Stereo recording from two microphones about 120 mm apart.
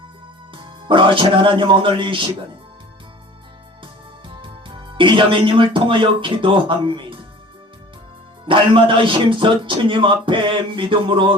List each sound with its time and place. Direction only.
0.5 s a man's voice: 45° right (ahead or behind)
4.3 s speech: 45° right (ahead or behind)
8.4 s a man's voice: 45° right (ahead or behind)